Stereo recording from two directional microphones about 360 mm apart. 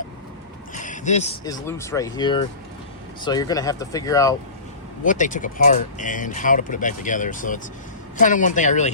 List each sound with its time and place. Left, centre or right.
0.7 s speech: left
5.0 s speech: left